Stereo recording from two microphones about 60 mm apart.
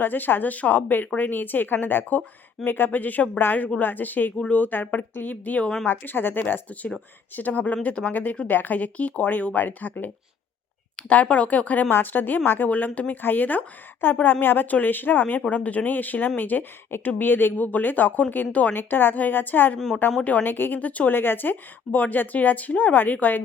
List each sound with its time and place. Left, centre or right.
0.0 s speech: left
21.2 s speech: left